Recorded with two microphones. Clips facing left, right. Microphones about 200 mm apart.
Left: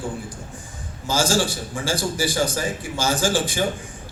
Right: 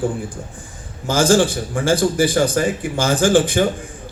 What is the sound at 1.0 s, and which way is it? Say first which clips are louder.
A man's voice: right 7 dB; 55° right (ahead or behind).